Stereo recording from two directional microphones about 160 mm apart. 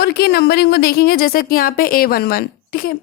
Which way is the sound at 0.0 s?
85° left.